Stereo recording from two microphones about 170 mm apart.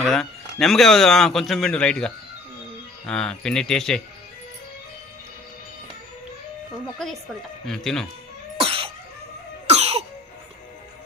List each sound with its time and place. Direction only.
0.0 s speech: centre (ahead or behind)
6.8 s speech: centre (ahead or behind)
8.5 s cough: 35° right (ahead or behind)